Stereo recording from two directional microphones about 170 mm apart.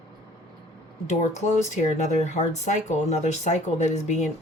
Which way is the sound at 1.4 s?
45° left (ahead or behind).